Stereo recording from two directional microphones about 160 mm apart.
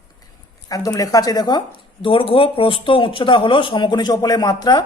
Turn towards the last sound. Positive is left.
turn(degrees=25)  # may be behind; listen again after turning